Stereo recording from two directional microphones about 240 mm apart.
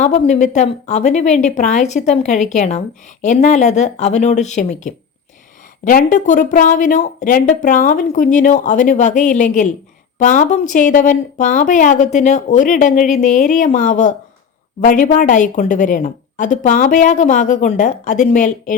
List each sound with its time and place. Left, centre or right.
0.0 s a woman's voice: left